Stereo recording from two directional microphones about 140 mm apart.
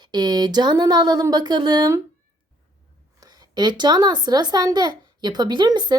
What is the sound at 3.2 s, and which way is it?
A child's voice, 30° right (ahead or behind).